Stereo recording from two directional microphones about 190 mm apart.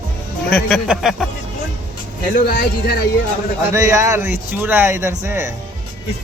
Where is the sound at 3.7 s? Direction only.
15° right (ahead or behind).